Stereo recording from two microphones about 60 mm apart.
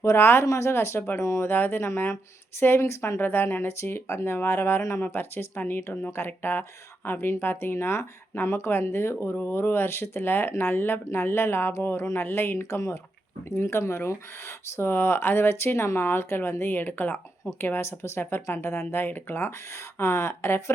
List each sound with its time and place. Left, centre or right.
0.0 s speech: left
0.4 s speech: left
1.5 s speech: left
2.8 s speech: left
3.2 s speech: left
4.8 s speech: left
5.0 s speech: left
17.6 s speech: left
18.9 s speech: left